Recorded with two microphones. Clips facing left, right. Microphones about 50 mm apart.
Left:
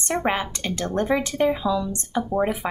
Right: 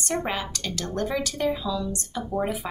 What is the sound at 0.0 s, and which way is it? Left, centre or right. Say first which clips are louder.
Speech: left 4 dB; left.